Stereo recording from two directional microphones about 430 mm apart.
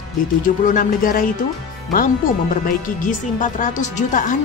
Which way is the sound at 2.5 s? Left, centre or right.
Centre.